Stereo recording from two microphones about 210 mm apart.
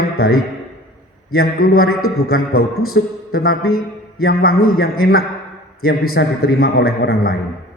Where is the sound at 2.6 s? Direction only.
85° left.